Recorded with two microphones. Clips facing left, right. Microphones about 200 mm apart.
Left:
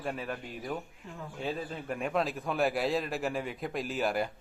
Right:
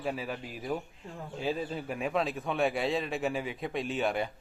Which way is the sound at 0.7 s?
15° right (ahead or behind).